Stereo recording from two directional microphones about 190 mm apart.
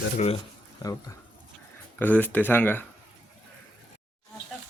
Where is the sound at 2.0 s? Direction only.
10° left (ahead or behind).